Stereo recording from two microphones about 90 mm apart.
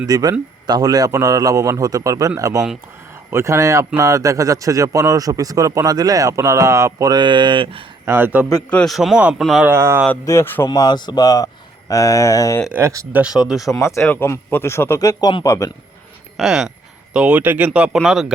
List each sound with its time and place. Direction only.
0.1 s a man's voice: 45° right (ahead or behind)
7.1 s speech: 60° right (ahead or behind)
8.0 s speech: 25° right (ahead or behind)
8.9 s speech: 5° right (ahead or behind)
9.6 s speech: 30° right (ahead or behind)
10.2 s speech: 25° left (ahead or behind)
10.7 s speech: 55° left (ahead or behind)
12.7 s speech: 20° right (ahead or behind)
13.7 s speech: 30° left (ahead or behind)
16.4 s speech: 5° right (ahead or behind); by 17.7 s 20° right (ahead or behind)
17.7 s speech: 10° right (ahead or behind)